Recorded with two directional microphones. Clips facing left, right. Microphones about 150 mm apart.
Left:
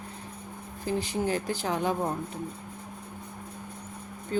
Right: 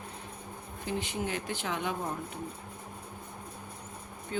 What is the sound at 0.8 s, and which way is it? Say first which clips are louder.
Speech: left 5 dB; 35° left (ahead or behind).